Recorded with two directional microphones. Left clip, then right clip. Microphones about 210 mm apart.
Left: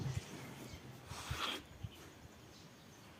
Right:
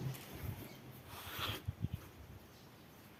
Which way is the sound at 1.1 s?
Centre (ahead or behind).